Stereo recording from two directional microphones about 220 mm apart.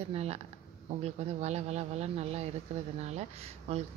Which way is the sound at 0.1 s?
30° right (ahead or behind).